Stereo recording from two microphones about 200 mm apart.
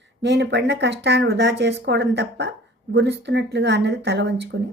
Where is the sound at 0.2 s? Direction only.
60° right (ahead or behind).